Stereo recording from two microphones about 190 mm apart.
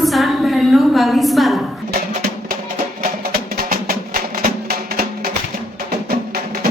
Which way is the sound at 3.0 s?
50° right (ahead or behind).